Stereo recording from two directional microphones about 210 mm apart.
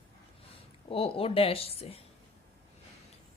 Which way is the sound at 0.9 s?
25° left (ahead or behind).